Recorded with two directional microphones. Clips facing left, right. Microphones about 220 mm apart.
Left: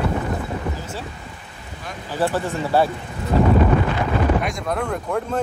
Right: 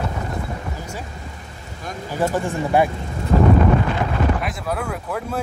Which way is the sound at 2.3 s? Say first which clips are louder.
Right 2 dB; 15° right (ahead or behind).